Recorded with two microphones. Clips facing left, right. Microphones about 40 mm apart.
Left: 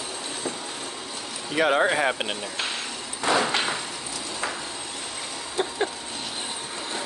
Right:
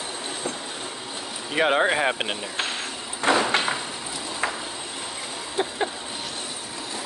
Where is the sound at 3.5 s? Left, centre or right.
Centre.